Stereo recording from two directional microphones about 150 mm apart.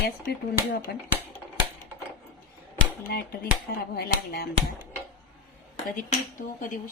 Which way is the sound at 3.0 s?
90° left.